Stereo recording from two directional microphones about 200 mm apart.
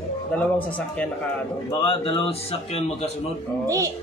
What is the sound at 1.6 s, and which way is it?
A man's voice, 25° left (ahead or behind).